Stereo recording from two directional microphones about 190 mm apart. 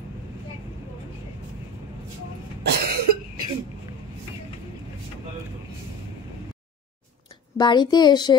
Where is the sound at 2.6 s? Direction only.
55° right (ahead or behind).